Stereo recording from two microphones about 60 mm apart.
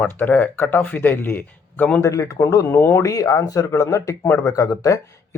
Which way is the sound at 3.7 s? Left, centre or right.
Left.